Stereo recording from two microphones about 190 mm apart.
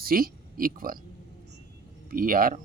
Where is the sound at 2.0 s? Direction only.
50° right (ahead or behind).